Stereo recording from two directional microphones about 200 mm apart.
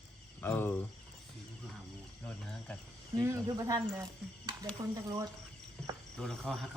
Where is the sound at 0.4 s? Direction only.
10° left (ahead or behind).